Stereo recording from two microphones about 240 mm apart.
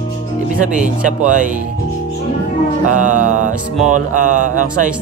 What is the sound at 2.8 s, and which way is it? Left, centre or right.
Speech, right.